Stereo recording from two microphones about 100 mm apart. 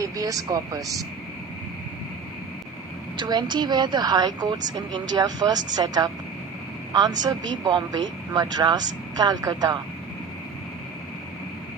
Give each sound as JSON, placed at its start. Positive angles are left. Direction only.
{"t": 0.0, "sound": "speech", "side_deg": -35}
{"t": 3.2, "sound": "a woman's voice", "side_deg": -45}